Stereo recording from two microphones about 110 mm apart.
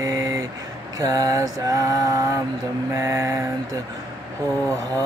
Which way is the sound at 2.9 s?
30° right (ahead or behind).